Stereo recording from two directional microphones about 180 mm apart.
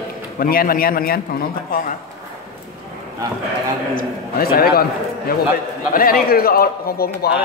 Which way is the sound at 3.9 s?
55° left (ahead or behind).